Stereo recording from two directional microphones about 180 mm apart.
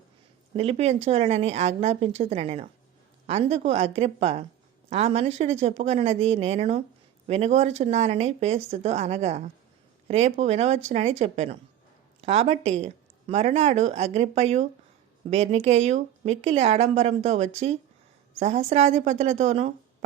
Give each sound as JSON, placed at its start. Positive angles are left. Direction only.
{"t": 0.5, "sound": "speech", "side_deg": -35}